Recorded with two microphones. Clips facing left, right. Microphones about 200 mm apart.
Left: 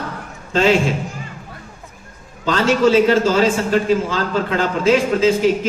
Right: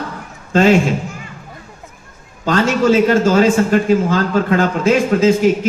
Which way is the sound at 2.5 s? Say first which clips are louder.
Right 1 dB; 45° right (ahead or behind).